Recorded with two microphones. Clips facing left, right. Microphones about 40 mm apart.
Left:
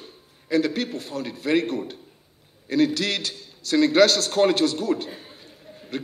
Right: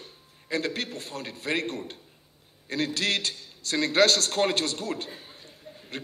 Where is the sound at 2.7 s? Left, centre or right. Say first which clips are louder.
Left 6 dB; right.